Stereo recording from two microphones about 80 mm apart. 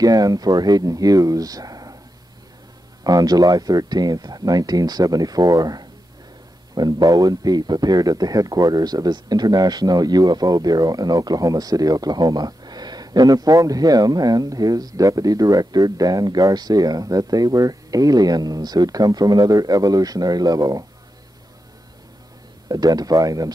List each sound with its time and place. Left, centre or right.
0.0 s speech: right
3.0 s speech: right
22.7 s speech: right